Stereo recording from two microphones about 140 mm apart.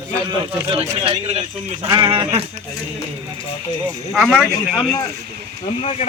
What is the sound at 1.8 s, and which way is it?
Speech, 25° right (ahead or behind).